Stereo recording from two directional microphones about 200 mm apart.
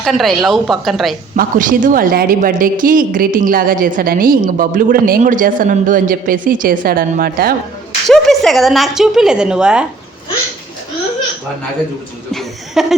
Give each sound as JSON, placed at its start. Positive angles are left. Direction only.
{"t": 0.0, "sound": "a woman's voice", "side_deg": 0}
{"t": 1.4, "sound": "a woman's voice", "side_deg": -40}
{"t": 8.0, "sound": "a woman's voice", "side_deg": 0}
{"t": 12.3, "sound": "chuckle", "side_deg": 0}